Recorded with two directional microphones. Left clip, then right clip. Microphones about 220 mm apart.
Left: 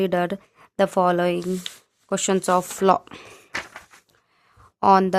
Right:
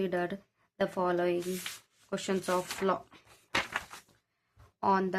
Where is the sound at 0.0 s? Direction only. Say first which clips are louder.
Left 10 dB; 50° left (ahead or behind).